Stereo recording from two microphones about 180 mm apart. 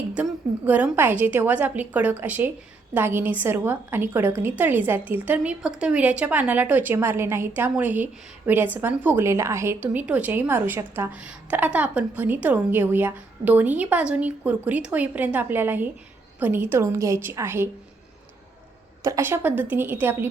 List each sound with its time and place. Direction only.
0.1 s a woman's voice: 10° right (ahead or behind)
19.0 s a woman's voice: 15° right (ahead or behind)